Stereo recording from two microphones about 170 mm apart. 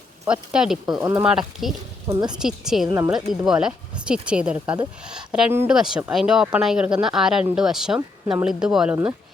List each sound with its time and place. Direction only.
0.3 s speech: 5° right (ahead or behind)
2.0 s speech: 25° right (ahead or behind)
2.4 s speech: 5° right (ahead or behind)